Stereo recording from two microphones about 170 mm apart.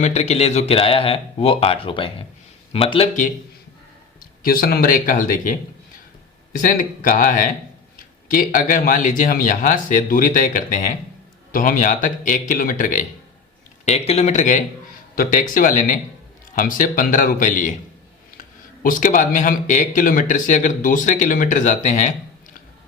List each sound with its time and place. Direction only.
0.0 s speech: 40° left (ahead or behind)
4.2 s speech: 60° left (ahead or behind)
6.6 s speech: 55° left (ahead or behind)
13.8 s speech: 40° left (ahead or behind)